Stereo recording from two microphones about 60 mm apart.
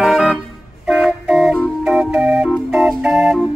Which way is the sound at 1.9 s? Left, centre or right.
Centre.